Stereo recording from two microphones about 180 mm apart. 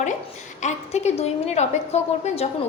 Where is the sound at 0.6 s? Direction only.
40° left (ahead or behind).